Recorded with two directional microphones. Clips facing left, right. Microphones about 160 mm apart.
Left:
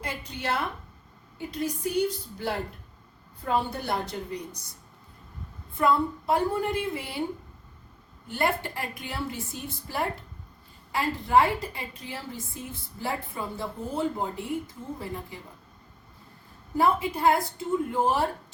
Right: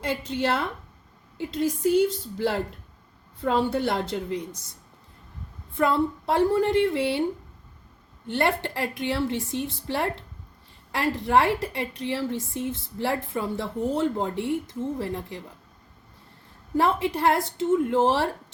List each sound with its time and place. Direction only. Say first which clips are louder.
0.0 s a woman's voice: right 8 dB; 90° right
5.8 s a woman's voice: right 1 dB; 80° right
8.3 s a woman's voice: right 3 dB; 75° right (ahead or behind)
16.7 s a woman's voice: right 1 dB; 85° right